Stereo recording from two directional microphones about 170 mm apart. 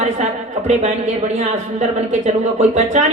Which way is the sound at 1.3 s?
40° right (ahead or behind).